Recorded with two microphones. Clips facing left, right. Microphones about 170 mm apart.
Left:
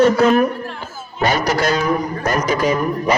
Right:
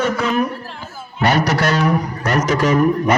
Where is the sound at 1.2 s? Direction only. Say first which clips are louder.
Right 1 dB; 70° right (ahead or behind).